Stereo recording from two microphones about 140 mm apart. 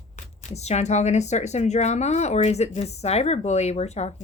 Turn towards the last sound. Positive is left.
turn(degrees=50)  # may be behind; listen again after turning